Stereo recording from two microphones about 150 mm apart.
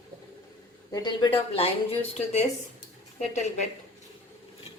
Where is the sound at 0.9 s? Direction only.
30° left (ahead or behind); by 3.6 s 50° left (ahead or behind).